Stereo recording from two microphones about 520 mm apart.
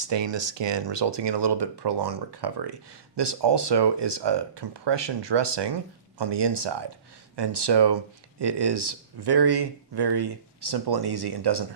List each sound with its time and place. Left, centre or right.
0.1 s speech: right